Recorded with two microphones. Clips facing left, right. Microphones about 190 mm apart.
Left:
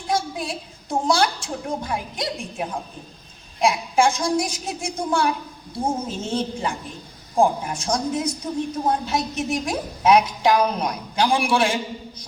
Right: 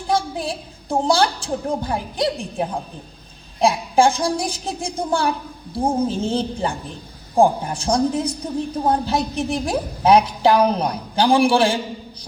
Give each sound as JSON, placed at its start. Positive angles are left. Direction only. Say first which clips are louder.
{"t": 0.1, "sound": "a woman's voice", "louder": "right 3 dB", "side_deg": -30}